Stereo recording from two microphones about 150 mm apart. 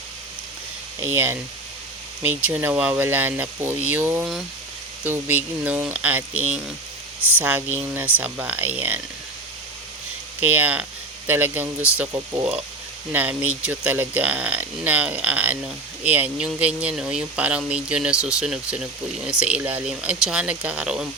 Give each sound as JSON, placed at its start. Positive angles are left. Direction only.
{"t": 0.9, "sound": "speech", "side_deg": -15}
{"t": 10.4, "sound": "speech", "side_deg": -10}
{"t": 13.1, "sound": "speech", "side_deg": -10}